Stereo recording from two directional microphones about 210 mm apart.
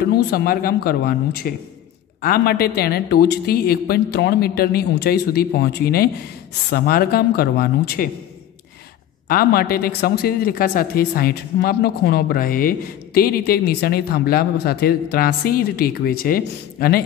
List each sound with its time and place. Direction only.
0.1 s speech: 50° left (ahead or behind)
9.3 s speech: 45° left (ahead or behind)